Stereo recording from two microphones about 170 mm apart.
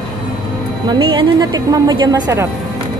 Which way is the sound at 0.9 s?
25° right (ahead or behind).